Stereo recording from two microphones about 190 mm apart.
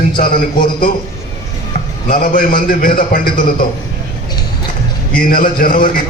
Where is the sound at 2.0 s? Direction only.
50° left (ahead or behind).